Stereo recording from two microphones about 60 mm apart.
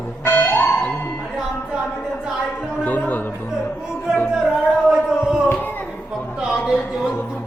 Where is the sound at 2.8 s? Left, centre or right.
Left.